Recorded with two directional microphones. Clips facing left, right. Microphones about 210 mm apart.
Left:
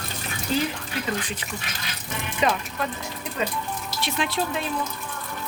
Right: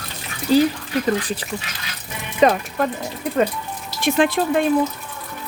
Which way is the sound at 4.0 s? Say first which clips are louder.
Right 10 dB; 50° right (ahead or behind).